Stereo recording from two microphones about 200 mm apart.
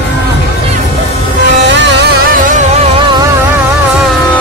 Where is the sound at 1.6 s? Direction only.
60° right (ahead or behind).